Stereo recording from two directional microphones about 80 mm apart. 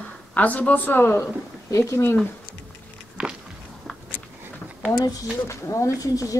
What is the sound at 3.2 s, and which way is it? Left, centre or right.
Walk, centre.